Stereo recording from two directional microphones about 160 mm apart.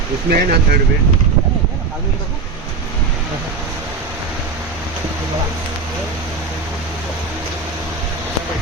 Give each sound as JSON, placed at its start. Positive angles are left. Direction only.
{"t": 0.3, "sound": "speech", "side_deg": -75}